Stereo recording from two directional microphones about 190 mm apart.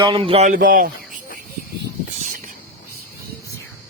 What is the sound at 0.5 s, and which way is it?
Speech, 50° right (ahead or behind).